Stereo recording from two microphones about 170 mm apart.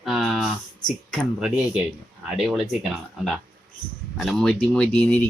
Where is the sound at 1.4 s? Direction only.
5° right (ahead or behind).